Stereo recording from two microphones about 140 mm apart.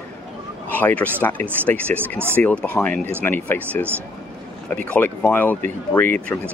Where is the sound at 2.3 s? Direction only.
10° left (ahead or behind).